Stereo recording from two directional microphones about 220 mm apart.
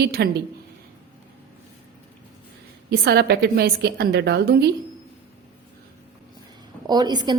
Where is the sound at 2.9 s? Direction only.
45° right (ahead or behind).